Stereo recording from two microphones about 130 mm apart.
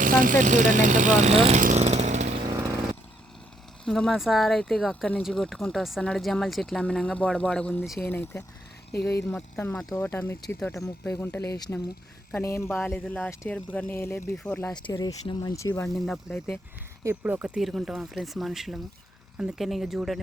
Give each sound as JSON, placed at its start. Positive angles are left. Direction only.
{"t": 0.0, "sound": "speech", "side_deg": -90}
{"t": 1.6, "sound": "chainsaw", "side_deg": -60}
{"t": 3.8, "sound": "speech", "side_deg": 5}
{"t": 14.3, "sound": "speech", "side_deg": 10}
{"t": 14.8, "sound": "speech", "side_deg": 35}
{"t": 15.5, "sound": "speech", "side_deg": 25}
{"t": 15.9, "sound": "speech", "side_deg": 0}
{"t": 17.2, "sound": "speech", "side_deg": -10}